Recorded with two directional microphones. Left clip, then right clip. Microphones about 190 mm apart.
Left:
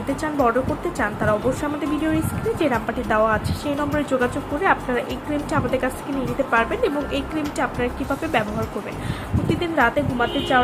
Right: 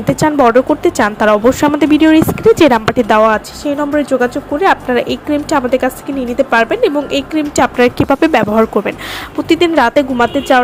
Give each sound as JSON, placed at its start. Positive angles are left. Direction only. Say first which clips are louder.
{"t": 0.2, "sound": "a woman's voice", "louder": "right 11 dB", "side_deg": -45}
{"t": 9.5, "sound": "a woman's voice", "louder": "right 10 dB", "side_deg": -60}